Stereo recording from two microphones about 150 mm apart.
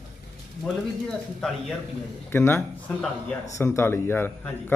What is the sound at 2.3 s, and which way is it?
A man's voice, 15° left (ahead or behind).